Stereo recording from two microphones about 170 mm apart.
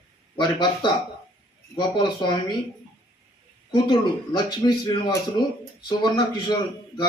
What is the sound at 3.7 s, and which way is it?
A man's voice, 25° left (ahead or behind).